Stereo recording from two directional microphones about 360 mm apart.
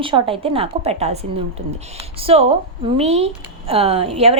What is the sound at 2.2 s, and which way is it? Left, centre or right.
A woman's voice, centre.